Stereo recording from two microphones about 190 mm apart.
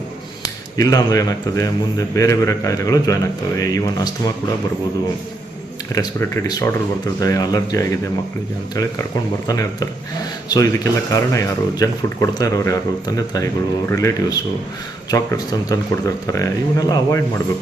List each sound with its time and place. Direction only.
0.8 s speech: 20° left (ahead or behind)
5.9 s speech: 15° left (ahead or behind)